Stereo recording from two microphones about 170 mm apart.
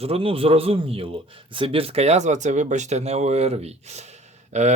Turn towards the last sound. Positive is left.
turn(degrees=-40)  # may be behind; listen again after turning